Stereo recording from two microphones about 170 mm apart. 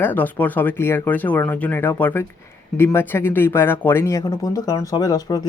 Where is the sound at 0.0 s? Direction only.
10° left (ahead or behind).